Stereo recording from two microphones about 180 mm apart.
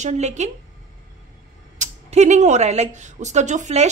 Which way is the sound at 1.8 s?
40° right (ahead or behind).